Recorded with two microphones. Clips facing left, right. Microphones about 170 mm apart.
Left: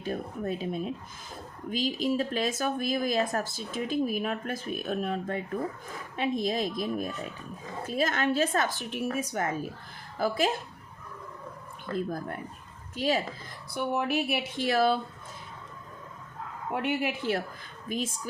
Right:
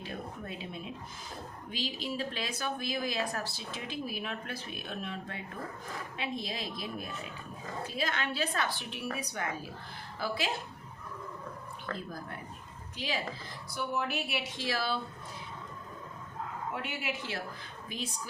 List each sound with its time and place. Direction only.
0.0 s speech: 45° left (ahead or behind)
13.0 s speech: 45° left (ahead or behind)
13.7 s speech: 60° left (ahead or behind)
16.7 s a woman's voice: 60° left (ahead or behind)